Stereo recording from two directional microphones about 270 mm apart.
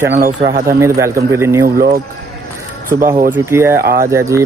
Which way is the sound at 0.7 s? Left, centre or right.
Centre.